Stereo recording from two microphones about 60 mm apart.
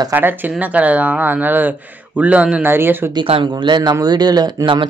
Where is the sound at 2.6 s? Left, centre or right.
Right.